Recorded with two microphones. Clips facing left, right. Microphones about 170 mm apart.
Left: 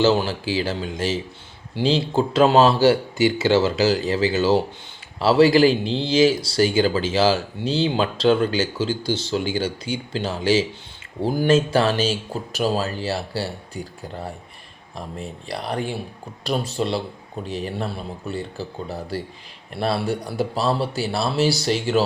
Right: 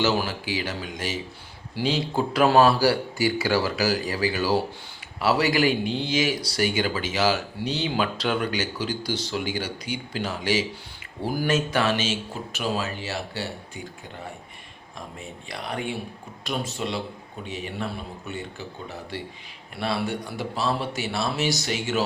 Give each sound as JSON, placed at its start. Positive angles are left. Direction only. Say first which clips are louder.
{"t": 0.0, "sound": "speech", "louder": "left 6 dB", "side_deg": 25}